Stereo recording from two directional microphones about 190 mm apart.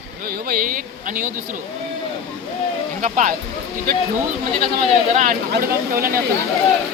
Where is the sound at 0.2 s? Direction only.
50° right (ahead or behind).